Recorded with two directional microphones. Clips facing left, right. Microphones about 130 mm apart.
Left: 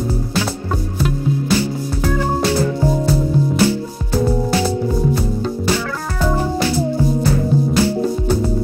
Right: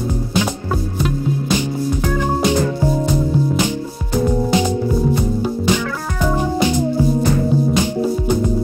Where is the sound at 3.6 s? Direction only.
15° right (ahead or behind).